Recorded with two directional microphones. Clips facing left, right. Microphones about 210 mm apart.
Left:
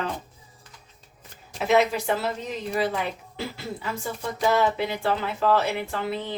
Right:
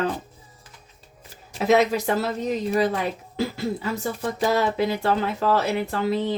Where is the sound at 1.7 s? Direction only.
40° right (ahead or behind).